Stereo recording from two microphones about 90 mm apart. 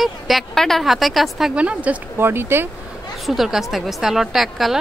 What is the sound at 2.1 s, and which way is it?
Speech, 25° right (ahead or behind).